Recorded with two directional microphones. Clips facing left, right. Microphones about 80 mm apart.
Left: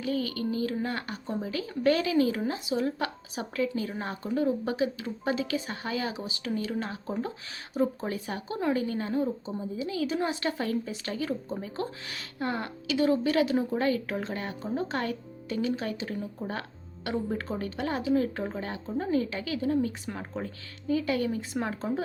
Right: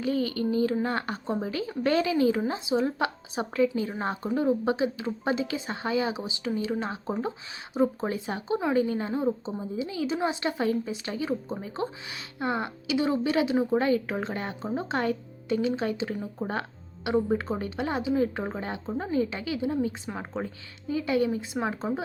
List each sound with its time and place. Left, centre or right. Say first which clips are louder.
0.0 s a woman's voice: right 3 dB; right